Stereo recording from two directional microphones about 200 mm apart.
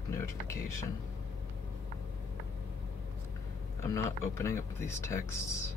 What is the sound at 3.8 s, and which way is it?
Speech, 15° left (ahead or behind).